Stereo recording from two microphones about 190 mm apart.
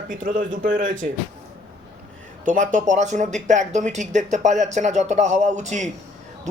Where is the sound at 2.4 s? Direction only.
40° right (ahead or behind).